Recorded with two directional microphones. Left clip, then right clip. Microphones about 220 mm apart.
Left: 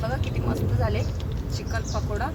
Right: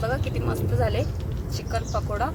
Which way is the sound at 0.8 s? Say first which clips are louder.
Right 5 dB; 35° right (ahead or behind).